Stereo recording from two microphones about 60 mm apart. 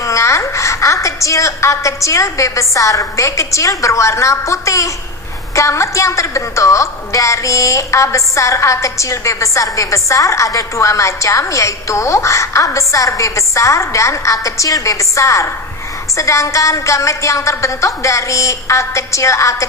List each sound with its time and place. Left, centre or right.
0.0 s a woman's voice: left